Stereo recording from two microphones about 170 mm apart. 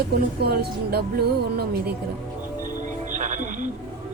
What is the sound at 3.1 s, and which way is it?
Music, 45° right (ahead or behind).